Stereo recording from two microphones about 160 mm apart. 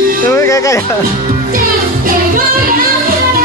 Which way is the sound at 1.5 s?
60° right (ahead or behind).